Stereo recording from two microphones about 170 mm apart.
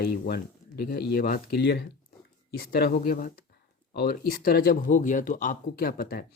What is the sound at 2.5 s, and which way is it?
Speech, 65° left (ahead or behind).